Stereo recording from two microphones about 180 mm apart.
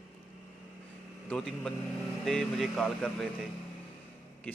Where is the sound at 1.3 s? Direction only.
5° left (ahead or behind).